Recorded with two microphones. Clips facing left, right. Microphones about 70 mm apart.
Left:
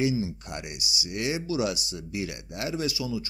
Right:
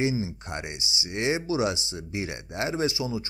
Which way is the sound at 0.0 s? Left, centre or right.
Right.